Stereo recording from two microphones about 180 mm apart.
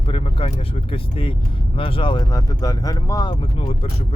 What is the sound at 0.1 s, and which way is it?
Speech, 30° left (ahead or behind).